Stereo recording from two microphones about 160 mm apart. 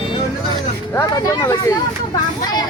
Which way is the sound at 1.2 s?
20° left (ahead or behind).